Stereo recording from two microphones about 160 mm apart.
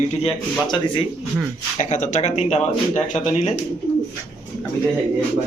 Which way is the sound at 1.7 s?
50° left (ahead or behind).